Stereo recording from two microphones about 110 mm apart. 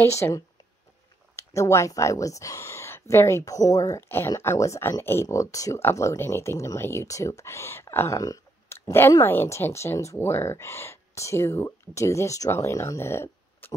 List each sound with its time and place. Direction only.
0.0 s speech: 25° left (ahead or behind)